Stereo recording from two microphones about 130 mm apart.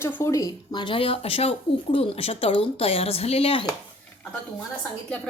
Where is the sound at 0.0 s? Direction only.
20° left (ahead or behind).